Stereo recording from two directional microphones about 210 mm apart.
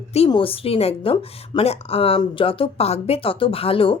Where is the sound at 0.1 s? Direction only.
25° left (ahead or behind).